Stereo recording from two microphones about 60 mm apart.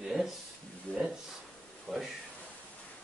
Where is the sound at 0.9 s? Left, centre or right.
Left.